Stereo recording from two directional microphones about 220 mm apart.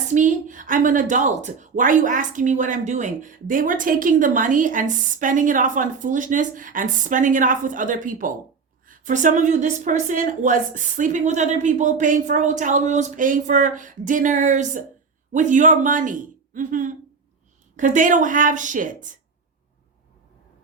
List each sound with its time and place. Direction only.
0.1 s a woman's voice: 35° right (ahead or behind)